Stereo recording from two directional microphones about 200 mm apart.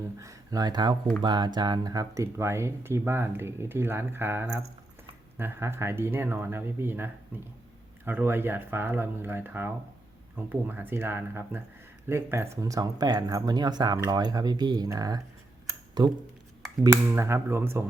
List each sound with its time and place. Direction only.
0.0 s speech: 15° right (ahead or behind)